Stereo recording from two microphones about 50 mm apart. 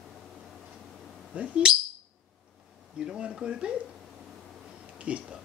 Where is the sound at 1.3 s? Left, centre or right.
Right.